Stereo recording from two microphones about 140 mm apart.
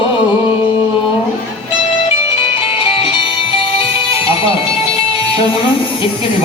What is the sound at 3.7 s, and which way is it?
Music, 40° left (ahead or behind).